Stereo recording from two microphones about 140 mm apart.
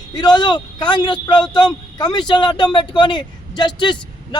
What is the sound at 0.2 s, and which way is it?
Speech, 30° left (ahead or behind).